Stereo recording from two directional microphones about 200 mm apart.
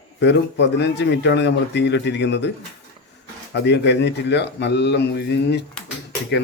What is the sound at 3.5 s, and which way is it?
A man's voice, 60° left (ahead or behind).